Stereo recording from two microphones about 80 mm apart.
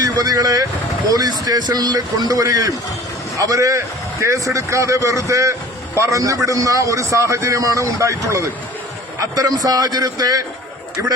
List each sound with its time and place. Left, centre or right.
0.0 s a man's voice: right